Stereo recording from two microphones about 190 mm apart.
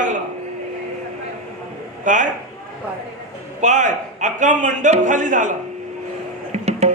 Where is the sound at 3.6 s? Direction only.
40° right (ahead or behind).